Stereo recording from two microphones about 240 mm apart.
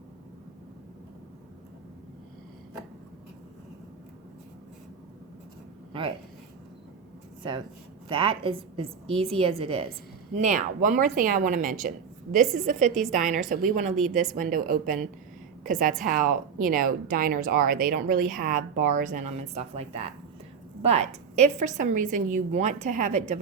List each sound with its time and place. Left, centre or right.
5.9 s speech: right
7.4 s a woman's voice: right
13.9 s a woman's voice: centre
14.3 s a woman's voice: right